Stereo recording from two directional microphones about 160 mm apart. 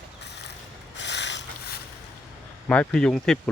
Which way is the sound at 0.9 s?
90° left.